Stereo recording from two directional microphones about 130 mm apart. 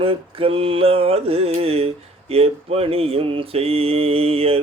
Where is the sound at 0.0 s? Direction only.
45° right (ahead or behind).